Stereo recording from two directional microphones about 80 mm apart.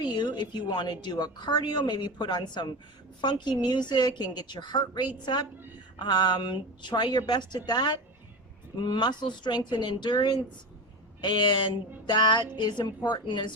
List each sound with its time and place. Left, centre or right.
0.0 s a woman's voice: left